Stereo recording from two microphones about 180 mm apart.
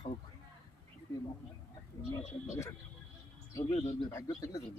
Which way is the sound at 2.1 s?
15° left (ahead or behind).